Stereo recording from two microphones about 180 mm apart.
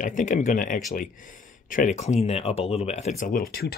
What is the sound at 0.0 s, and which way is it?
Speech, 45° left (ahead or behind).